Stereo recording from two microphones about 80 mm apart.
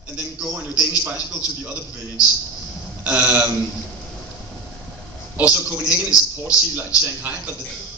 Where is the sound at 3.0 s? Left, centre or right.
Centre.